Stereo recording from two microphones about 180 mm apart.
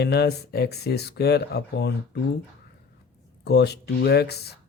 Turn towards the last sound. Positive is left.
turn(degrees=65)  # may be behind; listen again after turning